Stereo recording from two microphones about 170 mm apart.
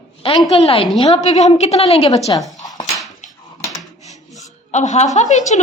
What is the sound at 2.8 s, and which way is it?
Dog, centre (ahead or behind).